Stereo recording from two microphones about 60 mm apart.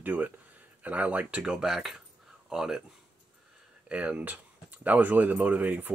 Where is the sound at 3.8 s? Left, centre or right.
Centre.